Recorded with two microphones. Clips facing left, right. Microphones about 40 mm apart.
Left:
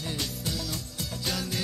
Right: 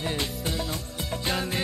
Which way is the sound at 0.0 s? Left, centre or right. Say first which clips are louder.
Right 4 dB; right.